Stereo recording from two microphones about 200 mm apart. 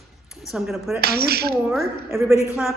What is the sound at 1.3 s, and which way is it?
Speech, 50° right (ahead or behind).